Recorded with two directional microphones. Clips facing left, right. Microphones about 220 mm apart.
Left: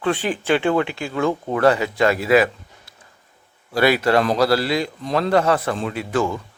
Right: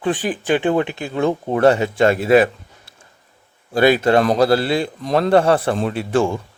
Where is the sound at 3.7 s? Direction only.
25° right (ahead or behind).